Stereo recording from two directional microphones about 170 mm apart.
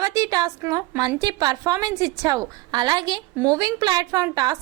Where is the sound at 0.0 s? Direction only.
20° right (ahead or behind).